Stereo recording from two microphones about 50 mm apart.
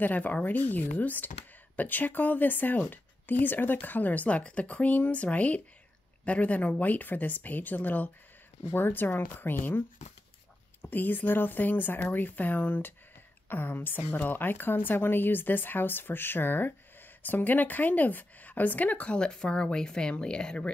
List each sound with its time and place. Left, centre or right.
0.0 s speech: left
19.4 s speech: centre